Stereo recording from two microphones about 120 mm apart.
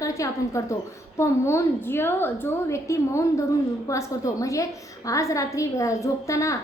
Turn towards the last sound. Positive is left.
turn(degrees=25)  # may be behind; listen again after turning